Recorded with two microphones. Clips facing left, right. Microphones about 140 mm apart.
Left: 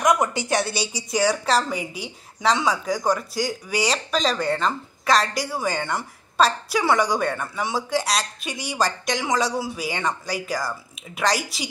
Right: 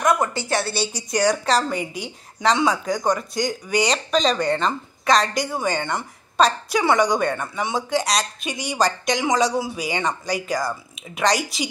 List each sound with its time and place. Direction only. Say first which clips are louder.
0.0 s a woman's voice: even; 15° left (ahead or behind)
0.9 s speech: right 1 dB; 5° left (ahead or behind)